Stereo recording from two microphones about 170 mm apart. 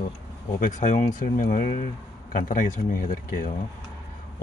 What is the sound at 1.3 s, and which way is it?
Speech, 60° left (ahead or behind).